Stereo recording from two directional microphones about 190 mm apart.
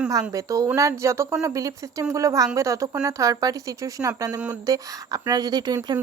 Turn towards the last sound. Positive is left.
turn(degrees=-20)  # may be behind; listen again after turning